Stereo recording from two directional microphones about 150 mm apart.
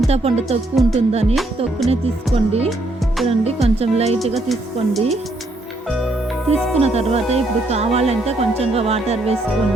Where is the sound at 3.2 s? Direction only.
45° right (ahead or behind).